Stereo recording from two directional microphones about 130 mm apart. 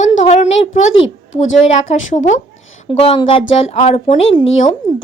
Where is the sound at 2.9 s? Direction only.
50° left (ahead or behind).